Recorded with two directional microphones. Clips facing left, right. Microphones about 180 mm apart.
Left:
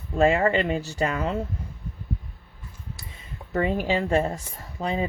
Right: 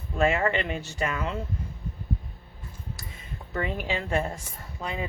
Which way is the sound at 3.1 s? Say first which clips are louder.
Left 6 dB; 30° left (ahead or behind).